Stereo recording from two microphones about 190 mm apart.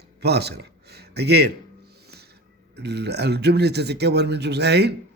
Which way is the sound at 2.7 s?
60° right (ahead or behind).